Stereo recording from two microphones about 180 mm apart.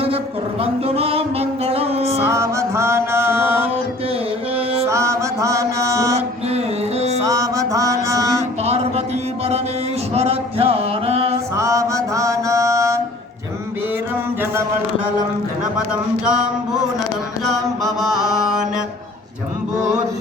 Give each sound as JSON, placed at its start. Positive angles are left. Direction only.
{"t": 0.6, "sound": "music", "side_deg": -35}
{"t": 2.2, "sound": "music", "side_deg": -15}
{"t": 4.5, "sound": "mantra", "side_deg": -35}
{"t": 4.9, "sound": "mantra", "side_deg": -15}
{"t": 7.3, "sound": "mantra", "side_deg": -20}
{"t": 8.6, "sound": "a sound", "side_deg": -35}
{"t": 10.2, "sound": "music", "side_deg": -35}
{"t": 11.5, "sound": "mantra", "side_deg": -15}
{"t": 18.0, "sound": "mantra", "side_deg": 0}